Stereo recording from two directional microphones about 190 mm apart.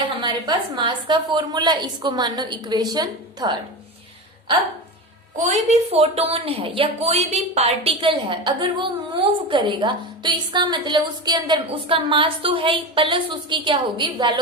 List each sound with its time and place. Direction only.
0.2 s a woman's voice: 25° right (ahead or behind)
5.4 s a woman's voice: 40° right (ahead or behind)